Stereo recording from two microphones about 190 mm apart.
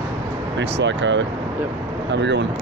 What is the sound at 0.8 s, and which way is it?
Speech, 70° right (ahead or behind).